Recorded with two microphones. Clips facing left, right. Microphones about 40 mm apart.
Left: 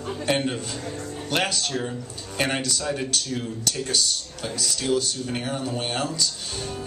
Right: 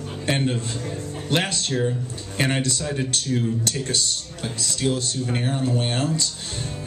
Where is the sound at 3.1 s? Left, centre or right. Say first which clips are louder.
Right 4 dB; right.